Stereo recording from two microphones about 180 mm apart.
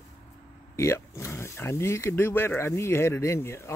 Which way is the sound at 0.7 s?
15° left (ahead or behind).